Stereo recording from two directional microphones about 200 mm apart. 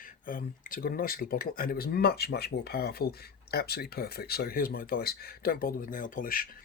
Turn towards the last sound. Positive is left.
turn(degrees=45)  # may be behind; listen again after turning